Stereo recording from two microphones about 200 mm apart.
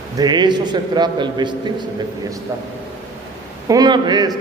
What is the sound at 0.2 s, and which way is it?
A man's voice, 20° right (ahead or behind).